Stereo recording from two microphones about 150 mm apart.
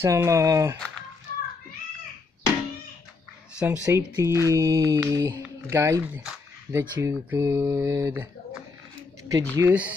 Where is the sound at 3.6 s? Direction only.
15° right (ahead or behind).